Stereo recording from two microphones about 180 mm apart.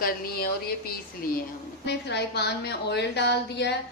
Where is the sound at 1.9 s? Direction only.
70° left (ahead or behind).